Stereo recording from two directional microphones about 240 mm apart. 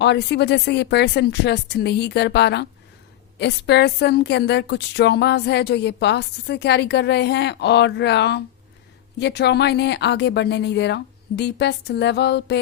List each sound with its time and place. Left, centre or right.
0.0 s a woman's voice: left